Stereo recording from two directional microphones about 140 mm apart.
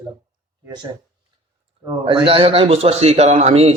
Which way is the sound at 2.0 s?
40° right (ahead or behind).